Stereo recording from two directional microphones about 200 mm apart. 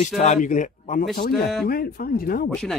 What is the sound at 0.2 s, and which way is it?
Speech, 40° left (ahead or behind).